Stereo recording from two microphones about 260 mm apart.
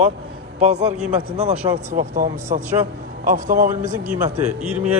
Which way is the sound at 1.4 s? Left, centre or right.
Right.